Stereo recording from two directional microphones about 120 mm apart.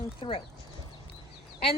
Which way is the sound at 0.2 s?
50° left (ahead or behind).